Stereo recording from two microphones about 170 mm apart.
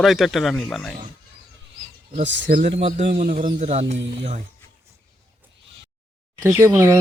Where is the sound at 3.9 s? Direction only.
90° right.